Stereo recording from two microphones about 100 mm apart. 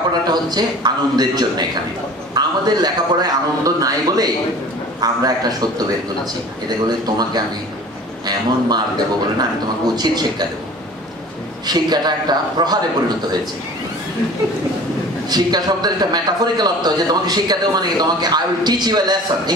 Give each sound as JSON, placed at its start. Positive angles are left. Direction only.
{"t": 0.3, "sound": "a man's voice", "side_deg": -45}
{"t": 6.9, "sound": "a man's voice", "side_deg": -45}
{"t": 11.6, "sound": "a man's voice", "side_deg": -45}
{"t": 15.2, "sound": "a man's voice", "side_deg": -45}